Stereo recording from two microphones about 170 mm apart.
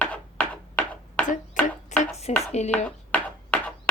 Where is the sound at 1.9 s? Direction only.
45° left (ahead or behind).